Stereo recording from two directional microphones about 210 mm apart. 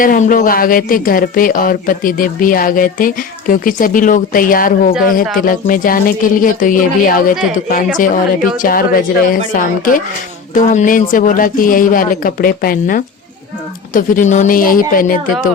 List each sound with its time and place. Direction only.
0.0 s speech: 40° left (ahead or behind)
10.5 s speech: 35° left (ahead or behind)